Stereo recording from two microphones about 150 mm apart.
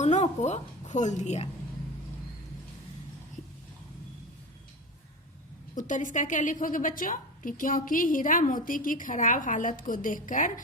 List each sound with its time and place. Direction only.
0.0 s a woman's voice: 50° left (ahead or behind)
5.7 s a woman's voice: 60° left (ahead or behind)